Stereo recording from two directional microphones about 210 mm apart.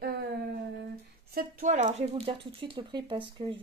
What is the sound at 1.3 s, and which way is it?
Speech, 40° right (ahead or behind).